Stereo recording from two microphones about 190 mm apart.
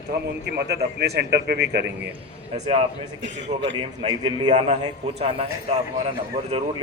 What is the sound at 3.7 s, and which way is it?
A man's voice, 25° right (ahead or behind).